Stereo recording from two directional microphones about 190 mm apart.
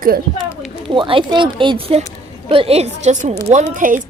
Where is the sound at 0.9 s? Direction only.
25° right (ahead or behind).